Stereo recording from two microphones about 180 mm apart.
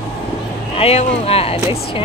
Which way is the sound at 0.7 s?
35° left (ahead or behind).